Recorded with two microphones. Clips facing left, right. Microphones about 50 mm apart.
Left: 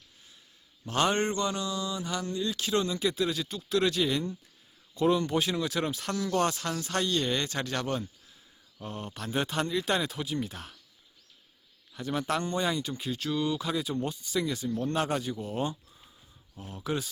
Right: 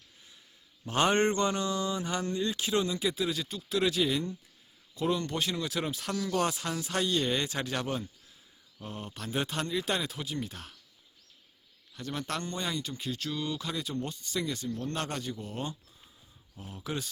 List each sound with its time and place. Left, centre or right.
0.9 s speech: right
2.6 s speech: centre
11.9 s speech: centre
16.6 s speech: centre